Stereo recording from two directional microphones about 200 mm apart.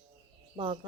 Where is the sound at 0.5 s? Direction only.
25° right (ahead or behind).